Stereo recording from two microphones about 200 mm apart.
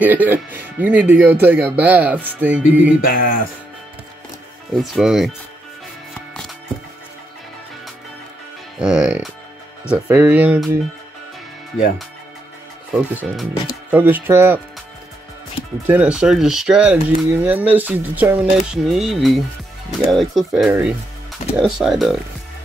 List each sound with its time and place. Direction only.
0.0 s speech: 10° right (ahead or behind)
3.0 s a sound: 45° left (ahead or behind)
4.9 s speech: centre (ahead or behind)
8.7 s speech: 5° right (ahead or behind)
12.9 s speech: 5° right (ahead or behind)
15.9 s speech: 5° right (ahead or behind)